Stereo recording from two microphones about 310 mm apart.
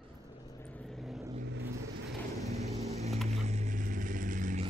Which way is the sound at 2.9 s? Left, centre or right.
Right.